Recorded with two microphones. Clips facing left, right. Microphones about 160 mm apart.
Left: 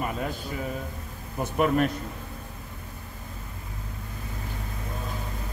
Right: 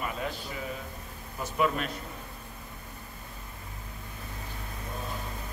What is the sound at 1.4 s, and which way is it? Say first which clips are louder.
Speech: left 6 dB; 55° left (ahead or behind).